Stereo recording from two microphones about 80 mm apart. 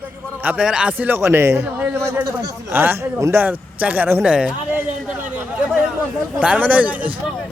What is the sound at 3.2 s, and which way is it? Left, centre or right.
Speech, right.